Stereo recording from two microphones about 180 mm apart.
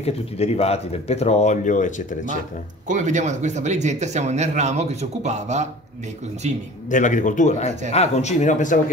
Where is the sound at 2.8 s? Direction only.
45° right (ahead or behind).